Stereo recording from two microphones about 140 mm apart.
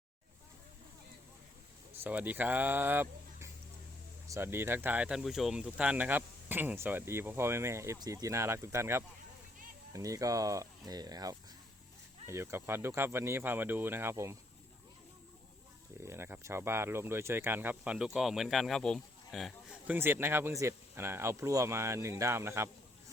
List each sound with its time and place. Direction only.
2.0 s speech: 10° right (ahead or behind)
16.0 s speech: 20° right (ahead or behind); by 19.5 s centre (ahead or behind)
19.9 s speech: 15° right (ahead or behind)